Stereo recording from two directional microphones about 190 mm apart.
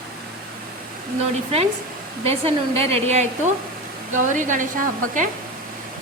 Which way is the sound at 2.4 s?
30° right (ahead or behind).